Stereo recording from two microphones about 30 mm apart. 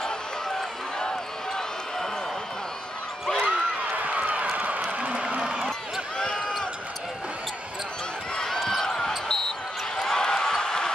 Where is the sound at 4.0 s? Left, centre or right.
Right.